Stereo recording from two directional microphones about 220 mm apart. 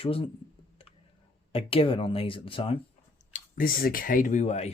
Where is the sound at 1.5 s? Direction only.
25° left (ahead or behind).